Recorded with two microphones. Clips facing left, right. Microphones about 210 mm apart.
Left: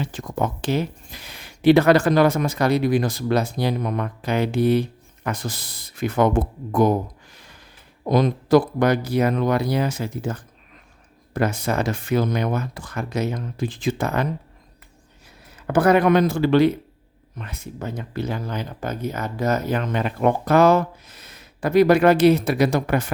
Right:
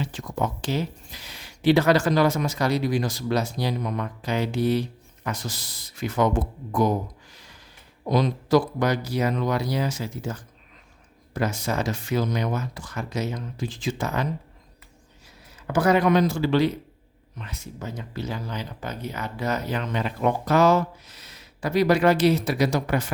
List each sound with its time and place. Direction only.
0.0 s speech: 50° left (ahead or behind)
7.3 s a sound: 55° left (ahead or behind)
8.0 s speech: 50° left (ahead or behind)
15.5 s speech: 55° left (ahead or behind)